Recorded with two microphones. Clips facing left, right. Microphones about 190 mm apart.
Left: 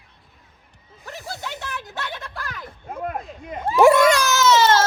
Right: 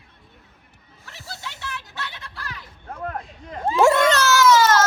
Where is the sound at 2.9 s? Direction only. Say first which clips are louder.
Left 2 dB; 20° left (ahead or behind).